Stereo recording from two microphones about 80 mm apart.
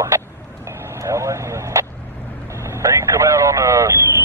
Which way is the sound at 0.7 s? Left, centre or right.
Right.